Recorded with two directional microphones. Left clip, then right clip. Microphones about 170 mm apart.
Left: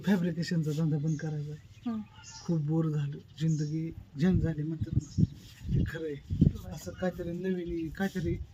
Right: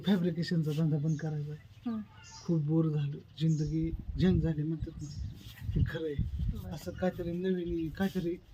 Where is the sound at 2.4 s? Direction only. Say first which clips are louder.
Right 1 dB; 5° left (ahead or behind).